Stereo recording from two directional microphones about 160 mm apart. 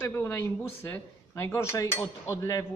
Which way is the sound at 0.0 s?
15° left (ahead or behind).